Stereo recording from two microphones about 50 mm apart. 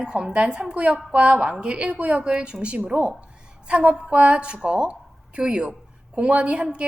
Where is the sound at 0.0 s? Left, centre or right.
Centre.